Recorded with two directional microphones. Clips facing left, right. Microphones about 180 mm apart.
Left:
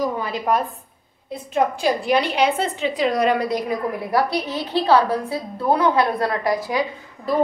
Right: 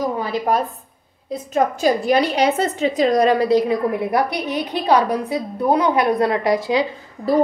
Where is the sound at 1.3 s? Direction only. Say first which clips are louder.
Right 2 dB; 40° right (ahead or behind); by 6.8 s 25° right (ahead or behind).